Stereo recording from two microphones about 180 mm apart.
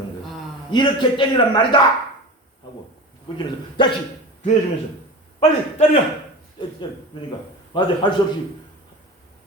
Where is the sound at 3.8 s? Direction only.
25° left (ahead or behind).